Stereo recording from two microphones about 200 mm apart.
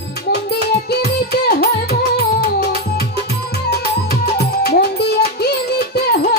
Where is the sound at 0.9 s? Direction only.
55° left (ahead or behind).